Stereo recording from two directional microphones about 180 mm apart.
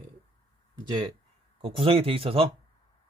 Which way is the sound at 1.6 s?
30° right (ahead or behind).